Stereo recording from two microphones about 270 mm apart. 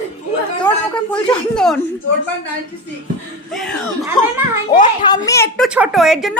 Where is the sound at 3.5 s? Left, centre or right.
Centre.